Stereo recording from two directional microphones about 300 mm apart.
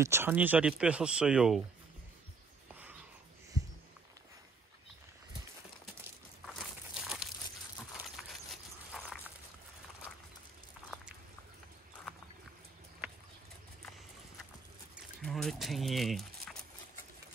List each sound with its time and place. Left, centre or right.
0.0 s speech: centre
2.7 s a sound: centre
6.4 s crumpling: centre
8.0 s horse: centre
9.0 s a sound: centre
15.2 s speech: centre